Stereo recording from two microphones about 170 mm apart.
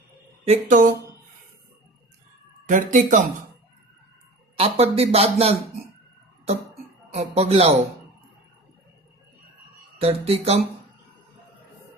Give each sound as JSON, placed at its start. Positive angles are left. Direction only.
{"t": 0.4, "sound": "speech", "side_deg": -45}
{"t": 2.6, "sound": "speech", "side_deg": -50}
{"t": 4.5, "sound": "a man's voice", "side_deg": -35}
{"t": 7.1, "sound": "a man's voice", "side_deg": -40}
{"t": 10.0, "sound": "a man's voice", "side_deg": -35}